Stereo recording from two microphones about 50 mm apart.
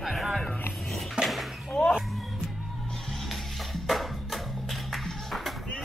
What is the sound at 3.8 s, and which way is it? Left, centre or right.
Music, centre.